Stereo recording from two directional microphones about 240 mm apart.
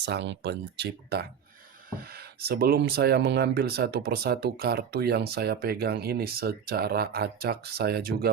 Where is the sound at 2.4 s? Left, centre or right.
Right.